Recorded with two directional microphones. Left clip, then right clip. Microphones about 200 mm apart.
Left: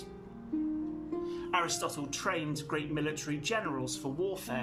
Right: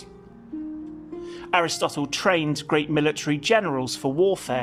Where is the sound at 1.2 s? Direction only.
40° right (ahead or behind).